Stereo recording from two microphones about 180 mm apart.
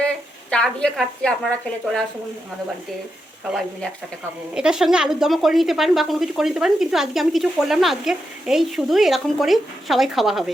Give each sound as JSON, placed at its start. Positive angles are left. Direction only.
{"t": 0.5, "sound": "speech", "side_deg": 5}
{"t": 3.5, "sound": "speech", "side_deg": 5}